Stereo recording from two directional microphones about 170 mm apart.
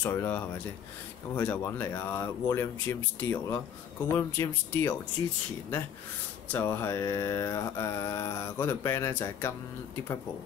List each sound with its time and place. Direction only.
0.0 s mantra: 10° left (ahead or behind)
6.5 s mantra: 15° left (ahead or behind)